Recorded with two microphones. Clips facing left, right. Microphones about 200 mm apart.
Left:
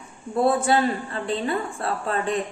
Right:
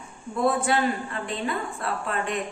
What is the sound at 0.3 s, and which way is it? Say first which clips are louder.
A woman's voice: left 3 dB; 30° left (ahead or behind).